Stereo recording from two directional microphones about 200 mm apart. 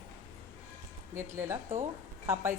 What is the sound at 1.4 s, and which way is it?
A woman's voice, 15° right (ahead or behind).